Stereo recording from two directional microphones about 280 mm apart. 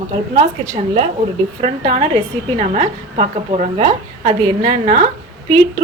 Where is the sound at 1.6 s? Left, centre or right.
Centre.